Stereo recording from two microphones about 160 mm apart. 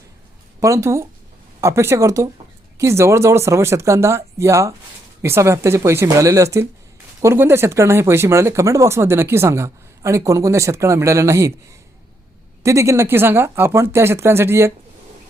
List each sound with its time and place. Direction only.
0.6 s speech: 20° right (ahead or behind)
12.6 s speech: 20° right (ahead or behind)